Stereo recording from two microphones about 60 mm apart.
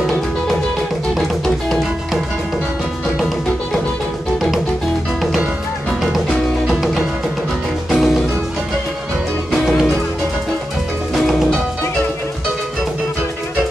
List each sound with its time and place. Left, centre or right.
1.1 s music: centre
3.2 s music: centre
6.7 s music: centre
9.5 s music: centre
11.1 s music: centre